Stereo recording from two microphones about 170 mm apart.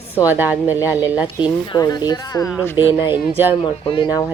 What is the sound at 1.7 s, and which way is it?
Speech, 25° left (ahead or behind).